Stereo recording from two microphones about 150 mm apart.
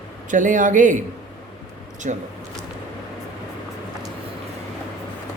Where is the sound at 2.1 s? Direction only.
55° right (ahead or behind).